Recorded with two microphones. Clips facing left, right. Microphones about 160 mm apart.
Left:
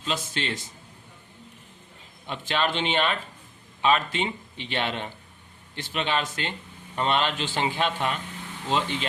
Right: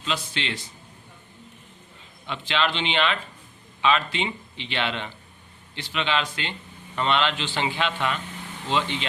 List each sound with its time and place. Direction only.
0.3 s a man's voice: 45° left (ahead or behind)
2.2 s a man's voice: 45° left (ahead or behind)